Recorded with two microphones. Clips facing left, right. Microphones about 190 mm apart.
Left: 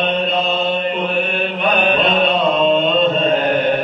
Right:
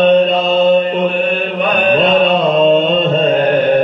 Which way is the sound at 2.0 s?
45° right (ahead or behind).